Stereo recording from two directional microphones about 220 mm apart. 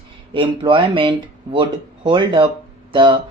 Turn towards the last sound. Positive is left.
turn(degrees=-20)  # may be behind; listen again after turning